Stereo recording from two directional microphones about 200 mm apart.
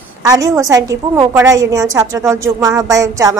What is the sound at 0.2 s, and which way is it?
A woman's voice, 15° right (ahead or behind).